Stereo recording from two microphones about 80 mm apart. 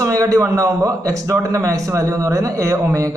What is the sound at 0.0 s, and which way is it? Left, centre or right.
A man's voice, right.